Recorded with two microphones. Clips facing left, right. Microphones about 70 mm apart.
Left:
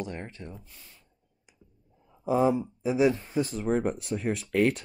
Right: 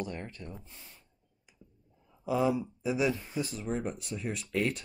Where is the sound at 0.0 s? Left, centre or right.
Left.